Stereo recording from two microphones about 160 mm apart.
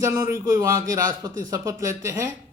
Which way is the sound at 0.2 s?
20° right (ahead or behind).